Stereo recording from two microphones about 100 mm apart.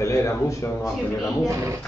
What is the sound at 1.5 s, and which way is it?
Speech, 30° right (ahead or behind).